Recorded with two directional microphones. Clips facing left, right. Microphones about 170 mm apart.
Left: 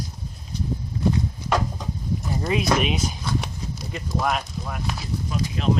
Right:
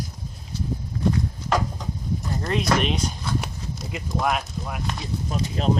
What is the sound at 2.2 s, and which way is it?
Speech, 5° left (ahead or behind).